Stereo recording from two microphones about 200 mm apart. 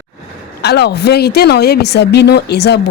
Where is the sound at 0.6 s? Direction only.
55° left (ahead or behind).